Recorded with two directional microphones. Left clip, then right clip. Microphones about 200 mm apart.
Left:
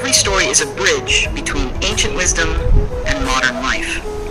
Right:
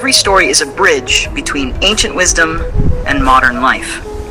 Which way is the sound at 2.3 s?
Centre (ahead or behind).